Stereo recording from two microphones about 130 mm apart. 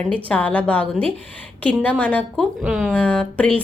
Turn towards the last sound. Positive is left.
turn(degrees=10)  # may be behind; listen again after turning